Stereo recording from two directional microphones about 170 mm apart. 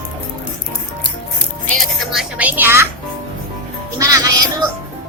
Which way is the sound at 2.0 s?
5° right (ahead or behind).